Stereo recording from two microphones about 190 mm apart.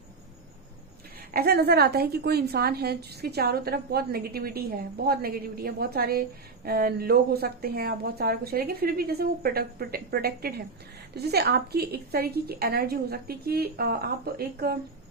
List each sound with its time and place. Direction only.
1.3 s a woman's voice: 55° right (ahead or behind)